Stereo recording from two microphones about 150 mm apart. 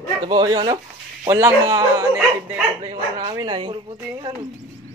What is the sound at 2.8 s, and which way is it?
Speech, 40° right (ahead or behind).